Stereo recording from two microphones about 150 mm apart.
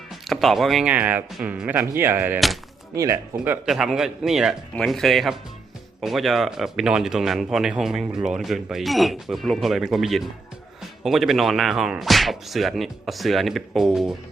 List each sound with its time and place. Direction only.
0.1 s speech: centre (ahead or behind); by 3.2 s 20° right (ahead or behind)
3.3 s speech: 10° right (ahead or behind)